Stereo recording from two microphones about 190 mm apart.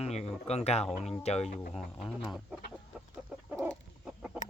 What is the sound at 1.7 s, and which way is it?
Speech, centre (ahead or behind).